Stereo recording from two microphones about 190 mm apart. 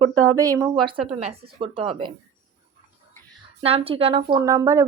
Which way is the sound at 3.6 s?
30° right (ahead or behind).